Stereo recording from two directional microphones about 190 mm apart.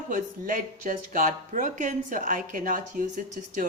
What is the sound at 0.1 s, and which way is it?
A woman's voice, 45° right (ahead or behind).